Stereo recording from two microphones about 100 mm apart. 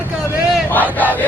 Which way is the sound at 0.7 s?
15° left (ahead or behind).